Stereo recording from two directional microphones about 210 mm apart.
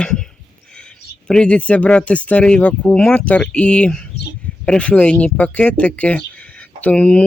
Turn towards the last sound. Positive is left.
turn(degrees=5)  # may be behind; listen again after turning